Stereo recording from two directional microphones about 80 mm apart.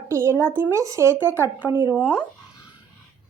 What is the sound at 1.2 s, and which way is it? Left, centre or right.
Speech, right.